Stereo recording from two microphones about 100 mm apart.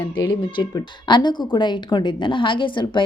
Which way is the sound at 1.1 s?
50° left (ahead or behind).